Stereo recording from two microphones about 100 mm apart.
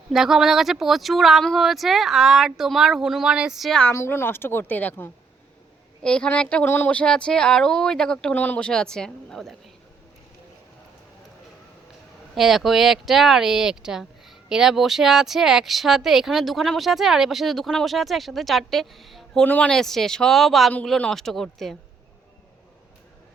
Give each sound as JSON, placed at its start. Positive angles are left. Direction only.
{"t": 0.1, "sound": "speech", "side_deg": -5}
{"t": 3.9, "sound": "a woman's voice", "side_deg": 25}
{"t": 12.3, "sound": "speech", "side_deg": 0}
{"t": 19.5, "sound": "speech", "side_deg": 15}
{"t": 19.7, "sound": "speech", "side_deg": 5}